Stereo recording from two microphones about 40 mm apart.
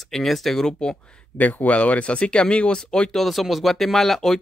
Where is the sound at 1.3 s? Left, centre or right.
Left; by 3.2 s centre.